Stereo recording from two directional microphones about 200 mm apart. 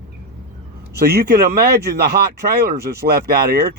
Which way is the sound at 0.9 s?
50° right (ahead or behind).